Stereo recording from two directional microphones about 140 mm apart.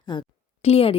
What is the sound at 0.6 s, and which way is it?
Speech, 45° left (ahead or behind).